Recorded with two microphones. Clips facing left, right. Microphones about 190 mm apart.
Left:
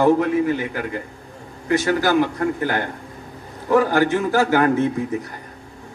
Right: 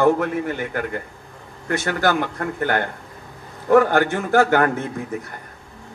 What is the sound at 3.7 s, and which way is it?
Speech, 55° right (ahead or behind).